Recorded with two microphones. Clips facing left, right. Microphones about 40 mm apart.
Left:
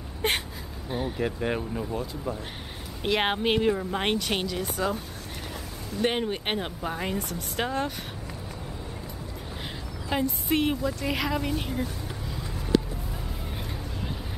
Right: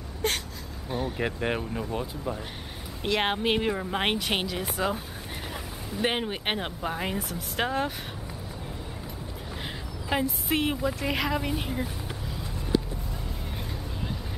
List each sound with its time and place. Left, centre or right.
0.2 s whimper: left
0.8 s speech: centre
1.2 s a woman's voice: centre
3.0 s speech: centre
3.7 s a woman's voice: centre
10.0 s a woman's voice: centre